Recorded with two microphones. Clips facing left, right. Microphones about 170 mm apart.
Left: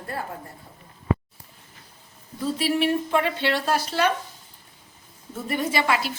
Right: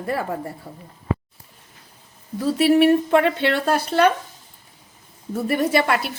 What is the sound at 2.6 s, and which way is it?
Speech, 60° right (ahead or behind).